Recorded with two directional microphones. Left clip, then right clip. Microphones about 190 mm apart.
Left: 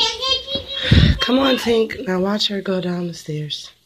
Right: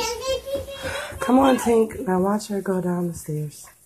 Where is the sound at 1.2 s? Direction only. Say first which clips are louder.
Right 2 dB; 10° left (ahead or behind).